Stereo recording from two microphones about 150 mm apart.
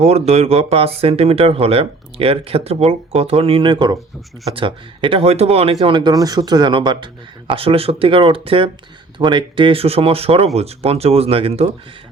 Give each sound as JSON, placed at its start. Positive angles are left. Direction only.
{"t": 0.0, "sound": "speech", "side_deg": -45}
{"t": 5.8, "sound": "speech", "side_deg": -30}